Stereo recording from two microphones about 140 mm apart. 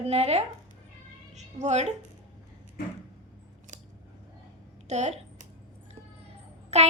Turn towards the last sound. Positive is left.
turn(degrees=-50)  # may be behind; listen again after turning